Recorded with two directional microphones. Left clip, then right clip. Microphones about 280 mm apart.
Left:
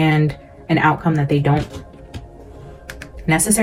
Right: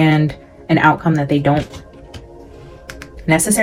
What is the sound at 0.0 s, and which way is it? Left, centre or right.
Speech, right.